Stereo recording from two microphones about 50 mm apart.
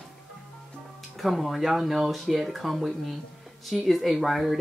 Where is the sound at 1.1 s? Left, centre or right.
Centre.